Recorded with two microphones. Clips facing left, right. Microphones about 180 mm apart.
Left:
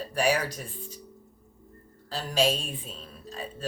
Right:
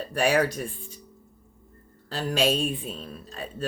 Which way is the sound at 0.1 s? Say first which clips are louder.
Right 4 dB; 55° right (ahead or behind).